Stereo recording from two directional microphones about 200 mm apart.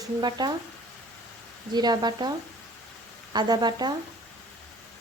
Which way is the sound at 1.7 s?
20° right (ahead or behind).